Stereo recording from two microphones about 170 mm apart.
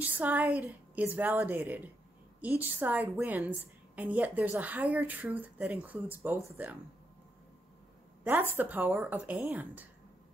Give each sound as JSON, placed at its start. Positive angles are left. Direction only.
{"t": 0.0, "sound": "a woman's voice", "side_deg": -10}
{"t": 8.2, "sound": "a woman's voice", "side_deg": -10}